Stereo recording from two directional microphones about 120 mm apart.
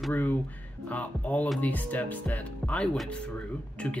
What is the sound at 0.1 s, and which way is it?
Speech, 15° left (ahead or behind).